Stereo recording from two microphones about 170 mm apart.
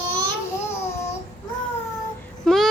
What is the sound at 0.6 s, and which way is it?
Babbling, 15° left (ahead or behind).